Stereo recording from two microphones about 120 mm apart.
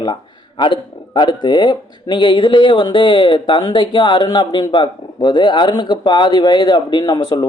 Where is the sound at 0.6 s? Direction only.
40° left (ahead or behind).